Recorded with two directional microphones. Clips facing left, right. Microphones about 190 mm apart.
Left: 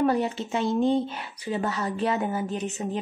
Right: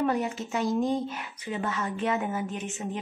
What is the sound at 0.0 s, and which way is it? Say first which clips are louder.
Speech: left 3 dB; 30° left (ahead or behind).